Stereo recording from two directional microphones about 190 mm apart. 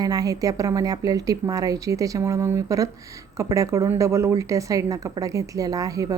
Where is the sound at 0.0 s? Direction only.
20° right (ahead or behind).